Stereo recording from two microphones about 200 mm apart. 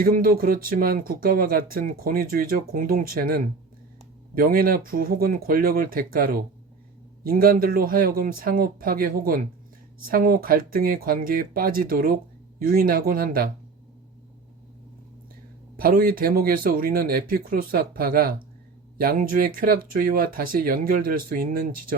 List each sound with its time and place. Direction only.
0.0 s speech: 45° right (ahead or behind)
15.8 s speech: 45° right (ahead or behind)